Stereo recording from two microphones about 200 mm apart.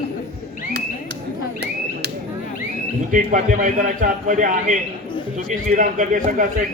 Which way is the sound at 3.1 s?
40° right (ahead or behind).